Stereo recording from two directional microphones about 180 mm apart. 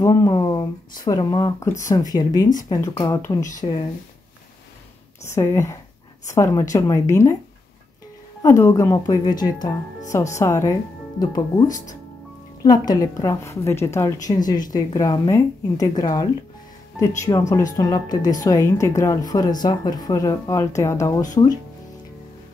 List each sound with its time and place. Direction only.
0.0 s a woman's voice: 20° left (ahead or behind)
5.2 s a woman's voice: 15° left (ahead or behind)
8.4 s a woman's voice: 15° left (ahead or behind)